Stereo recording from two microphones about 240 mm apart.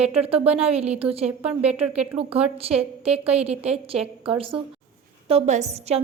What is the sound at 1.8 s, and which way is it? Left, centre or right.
Speech, centre.